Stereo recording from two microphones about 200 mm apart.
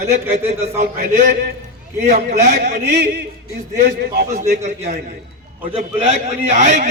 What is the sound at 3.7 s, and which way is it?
Speech, 50° right (ahead or behind).